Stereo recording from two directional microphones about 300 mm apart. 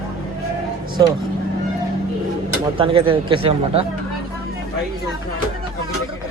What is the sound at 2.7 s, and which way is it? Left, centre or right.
Speech, centre.